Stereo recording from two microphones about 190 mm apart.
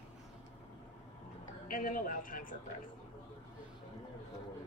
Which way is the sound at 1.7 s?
45° left (ahead or behind).